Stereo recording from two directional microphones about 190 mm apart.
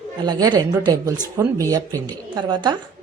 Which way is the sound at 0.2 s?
20° right (ahead or behind).